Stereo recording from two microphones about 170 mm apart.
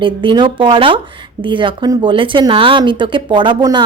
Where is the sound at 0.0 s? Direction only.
30° right (ahead or behind).